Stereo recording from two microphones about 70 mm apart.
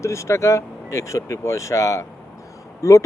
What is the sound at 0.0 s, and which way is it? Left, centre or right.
Speech, left.